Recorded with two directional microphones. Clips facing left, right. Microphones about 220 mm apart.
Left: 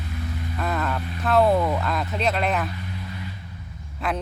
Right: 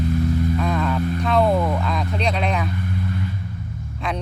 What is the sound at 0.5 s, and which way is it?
Speech, 5° left (ahead or behind).